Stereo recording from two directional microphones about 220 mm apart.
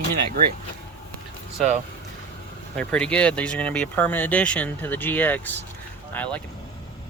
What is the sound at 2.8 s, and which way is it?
Speech, 5° left (ahead or behind).